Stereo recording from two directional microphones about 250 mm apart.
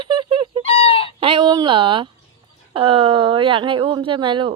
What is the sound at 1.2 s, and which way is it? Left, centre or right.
Speech, centre.